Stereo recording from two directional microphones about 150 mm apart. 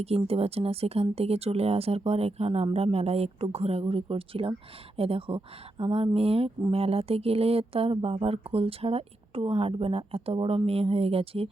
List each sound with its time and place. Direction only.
0.3 s speech: 40° right (ahead or behind)